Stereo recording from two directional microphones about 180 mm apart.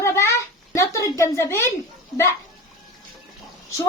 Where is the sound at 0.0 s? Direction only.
15° left (ahead or behind).